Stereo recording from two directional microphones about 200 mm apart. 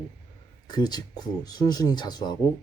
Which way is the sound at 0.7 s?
20° left (ahead or behind).